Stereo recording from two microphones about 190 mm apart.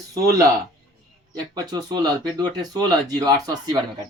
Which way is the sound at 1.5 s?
20° right (ahead or behind).